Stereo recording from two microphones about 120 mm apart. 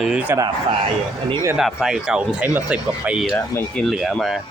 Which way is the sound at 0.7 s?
50° right (ahead or behind).